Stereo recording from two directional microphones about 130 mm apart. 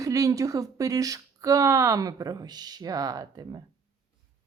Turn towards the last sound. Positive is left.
turn(degrees=-30)  # may be behind; listen again after turning